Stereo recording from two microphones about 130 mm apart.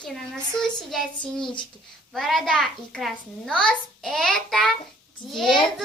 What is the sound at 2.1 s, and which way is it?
A child's voice, centre (ahead or behind).